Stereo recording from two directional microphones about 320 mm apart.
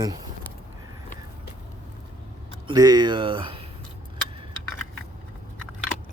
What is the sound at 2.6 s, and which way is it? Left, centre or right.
Speech, centre.